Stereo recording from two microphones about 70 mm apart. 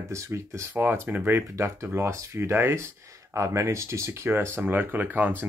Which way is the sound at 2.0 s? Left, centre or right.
Right.